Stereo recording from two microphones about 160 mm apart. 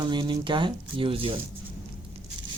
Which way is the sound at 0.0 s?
30° right (ahead or behind).